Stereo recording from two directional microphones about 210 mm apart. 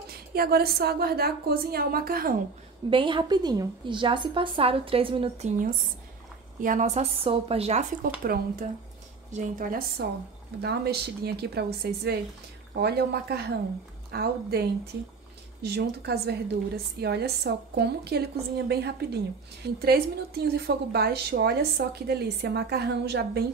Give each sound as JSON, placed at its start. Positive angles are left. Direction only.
{"t": 0.1, "sound": "a woman's voice", "side_deg": -45}
{"t": 2.9, "sound": "a woman's voice", "side_deg": -25}
{"t": 6.6, "sound": "speech", "side_deg": -35}
{"t": 8.2, "sound": "a woman's voice", "side_deg": -45}